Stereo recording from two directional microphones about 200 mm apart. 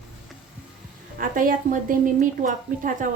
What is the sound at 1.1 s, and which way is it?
A woman's voice, 45° right (ahead or behind).